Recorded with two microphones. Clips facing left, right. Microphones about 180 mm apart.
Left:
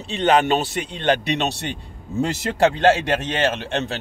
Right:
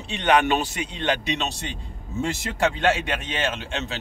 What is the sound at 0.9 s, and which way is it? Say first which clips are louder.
A man's voice: left 6 dB; 50° left (ahead or behind).